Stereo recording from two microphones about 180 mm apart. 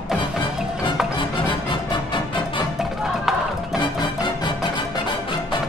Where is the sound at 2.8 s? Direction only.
Centre (ahead or behind).